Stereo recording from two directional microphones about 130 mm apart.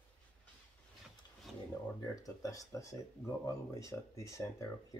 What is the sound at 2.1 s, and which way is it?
Speech, 25° left (ahead or behind).